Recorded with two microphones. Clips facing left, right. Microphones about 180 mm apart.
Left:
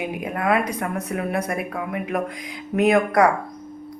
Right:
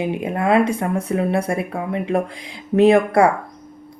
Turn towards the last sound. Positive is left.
turn(degrees=-30)  # may be behind; listen again after turning